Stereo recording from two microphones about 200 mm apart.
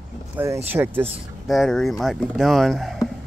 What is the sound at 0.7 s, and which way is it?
Speech, 10° right (ahead or behind).